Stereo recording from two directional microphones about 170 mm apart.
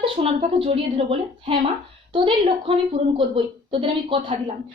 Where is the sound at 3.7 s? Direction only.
30° right (ahead or behind).